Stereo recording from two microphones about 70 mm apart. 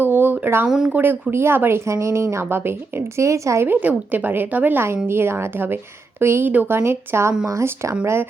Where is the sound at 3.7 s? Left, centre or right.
Right.